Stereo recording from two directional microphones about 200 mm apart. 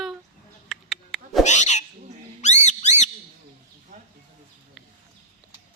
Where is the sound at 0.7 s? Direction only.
Centre (ahead or behind).